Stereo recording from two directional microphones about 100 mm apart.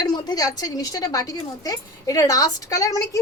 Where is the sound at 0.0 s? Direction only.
45° left (ahead or behind).